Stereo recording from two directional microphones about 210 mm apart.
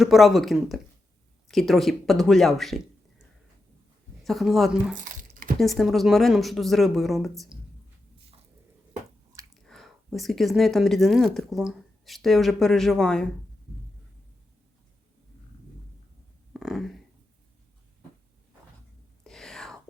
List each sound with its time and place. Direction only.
0.0 s speech: centre (ahead or behind)
4.2 s speech: centre (ahead or behind)
5.0 s squish: 40° right (ahead or behind)
5.5 s speech: centre (ahead or behind)
9.6 s speech: centre (ahead or behind)
16.5 s a sound: centre (ahead or behind)
19.2 s whispering: centre (ahead or behind)